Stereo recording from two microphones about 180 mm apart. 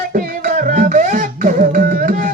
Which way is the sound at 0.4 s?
45° right (ahead or behind).